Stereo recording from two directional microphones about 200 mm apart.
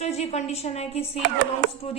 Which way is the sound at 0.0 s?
30° left (ahead or behind).